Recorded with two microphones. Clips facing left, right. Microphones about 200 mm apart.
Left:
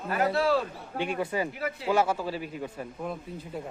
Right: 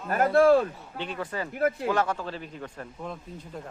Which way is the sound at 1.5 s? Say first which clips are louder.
Right 8 dB; 50° right (ahead or behind).